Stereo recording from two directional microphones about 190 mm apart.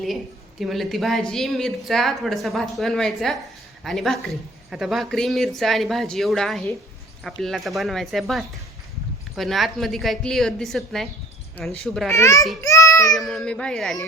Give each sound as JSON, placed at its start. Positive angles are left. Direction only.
{"t": 0.6, "sound": "a woman's voice", "side_deg": 0}
{"t": 12.1, "sound": "a child's voice", "side_deg": 15}
{"t": 12.6, "sound": "child singing", "side_deg": 15}
{"t": 13.1, "sound": "a woman's voice", "side_deg": 0}